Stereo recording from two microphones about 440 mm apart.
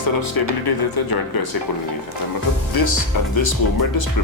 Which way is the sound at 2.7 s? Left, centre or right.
Left.